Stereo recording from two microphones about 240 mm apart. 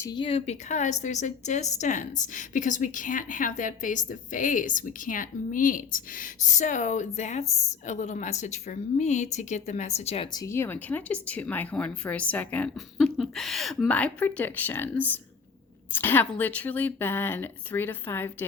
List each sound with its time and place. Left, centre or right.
0.0 s a woman's voice: centre
10.4 s speech: centre